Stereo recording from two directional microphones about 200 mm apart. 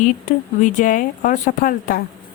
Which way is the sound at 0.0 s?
40° left (ahead or behind).